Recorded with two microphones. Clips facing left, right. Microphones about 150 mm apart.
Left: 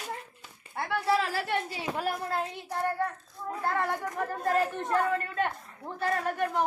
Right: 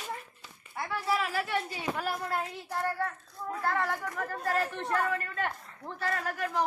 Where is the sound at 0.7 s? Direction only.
60° left (ahead or behind).